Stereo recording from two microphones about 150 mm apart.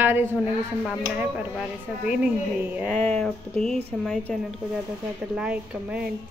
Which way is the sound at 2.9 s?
5° left (ahead or behind).